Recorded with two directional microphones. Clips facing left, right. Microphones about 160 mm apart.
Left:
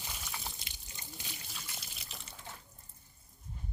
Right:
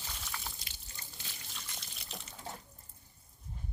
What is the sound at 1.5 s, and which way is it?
Water, 5° left (ahead or behind).